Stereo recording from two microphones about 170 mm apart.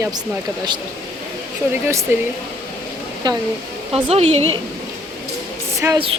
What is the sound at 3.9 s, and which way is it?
Speech, 35° right (ahead or behind).